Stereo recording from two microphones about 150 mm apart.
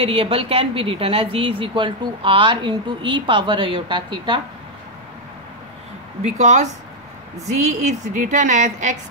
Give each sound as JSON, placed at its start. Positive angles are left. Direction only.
{"t": 0.0, "sound": "speech", "side_deg": -40}
{"t": 6.2, "sound": "a woman's voice", "side_deg": -50}